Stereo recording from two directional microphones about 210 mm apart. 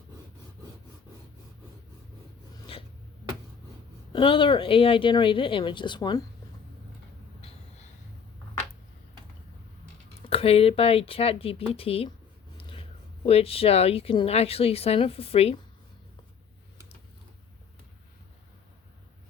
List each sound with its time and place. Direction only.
2.7 s a sound: 25° left (ahead or behind)
4.1 s speech: 25° left (ahead or behind)
10.2 s speech: 30° left (ahead or behind)